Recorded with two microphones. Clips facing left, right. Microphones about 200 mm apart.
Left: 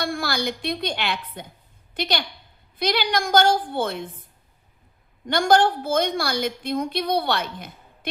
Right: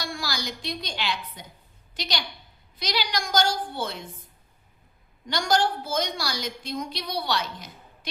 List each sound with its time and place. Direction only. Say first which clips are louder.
0.0 s a woman's voice: left 7 dB; 55° left (ahead or behind)
5.2 s a woman's voice: left 6 dB; 55° left (ahead or behind)